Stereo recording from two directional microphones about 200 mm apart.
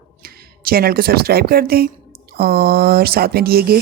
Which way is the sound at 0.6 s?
50° right (ahead or behind).